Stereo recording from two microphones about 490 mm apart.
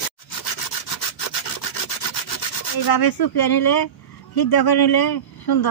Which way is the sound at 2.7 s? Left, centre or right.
Left.